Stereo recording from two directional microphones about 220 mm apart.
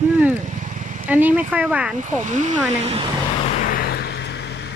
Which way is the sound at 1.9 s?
35° right (ahead or behind).